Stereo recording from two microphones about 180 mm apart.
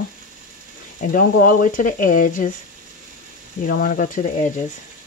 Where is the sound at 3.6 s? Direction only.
50° left (ahead or behind).